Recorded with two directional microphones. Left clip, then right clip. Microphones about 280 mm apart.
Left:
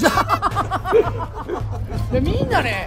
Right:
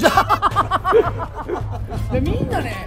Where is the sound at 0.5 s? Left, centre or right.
Centre.